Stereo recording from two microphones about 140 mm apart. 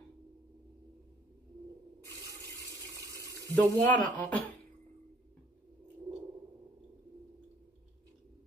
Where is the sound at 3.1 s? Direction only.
25° right (ahead or behind).